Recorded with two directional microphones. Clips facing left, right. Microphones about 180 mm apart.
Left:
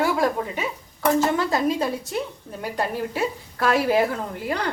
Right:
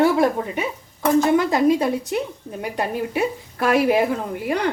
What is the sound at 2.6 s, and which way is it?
A woman's voice, 15° right (ahead or behind).